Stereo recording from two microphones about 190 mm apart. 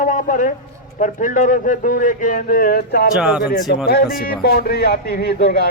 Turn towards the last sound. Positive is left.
turn(degrees=55)  # may be behind; listen again after turning